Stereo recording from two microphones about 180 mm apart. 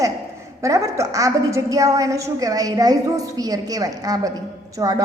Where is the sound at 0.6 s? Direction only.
15° right (ahead or behind).